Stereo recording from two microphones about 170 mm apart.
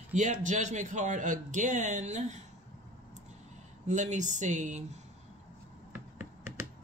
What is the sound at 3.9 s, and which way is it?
Speech, 45° right (ahead or behind).